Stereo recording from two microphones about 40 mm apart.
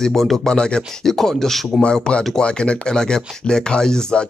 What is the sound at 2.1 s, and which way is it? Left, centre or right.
Speech, centre.